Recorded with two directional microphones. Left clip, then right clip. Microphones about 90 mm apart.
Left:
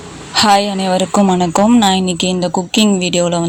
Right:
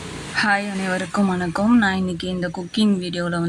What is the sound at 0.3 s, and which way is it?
Speech, 70° left (ahead or behind).